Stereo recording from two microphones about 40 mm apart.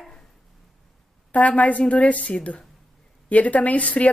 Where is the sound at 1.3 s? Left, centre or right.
Left.